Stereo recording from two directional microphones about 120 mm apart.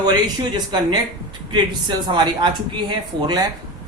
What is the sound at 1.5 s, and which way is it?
A woman's voice, 40° right (ahead or behind).